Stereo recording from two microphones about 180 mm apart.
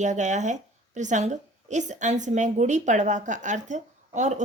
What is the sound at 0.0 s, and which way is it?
A woman's voice, 40° right (ahead or behind).